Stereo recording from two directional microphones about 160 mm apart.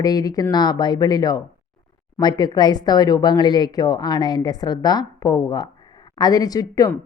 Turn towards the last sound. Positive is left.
turn(degrees=25)  # may be behind; listen again after turning